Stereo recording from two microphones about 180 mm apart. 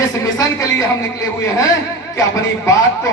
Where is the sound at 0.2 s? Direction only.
15° left (ahead or behind).